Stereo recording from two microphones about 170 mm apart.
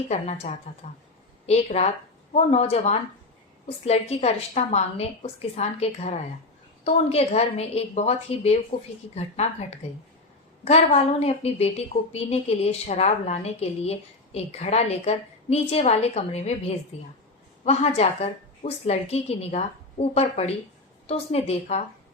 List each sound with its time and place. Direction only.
0.1 s a woman's voice: 40° left (ahead or behind)